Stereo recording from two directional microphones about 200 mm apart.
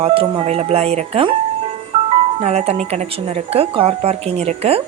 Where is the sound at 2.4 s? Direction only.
30° right (ahead or behind).